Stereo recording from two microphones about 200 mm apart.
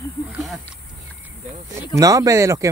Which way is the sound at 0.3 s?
Centre (ahead or behind).